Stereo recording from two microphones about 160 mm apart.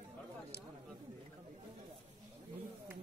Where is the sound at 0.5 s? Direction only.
90° left.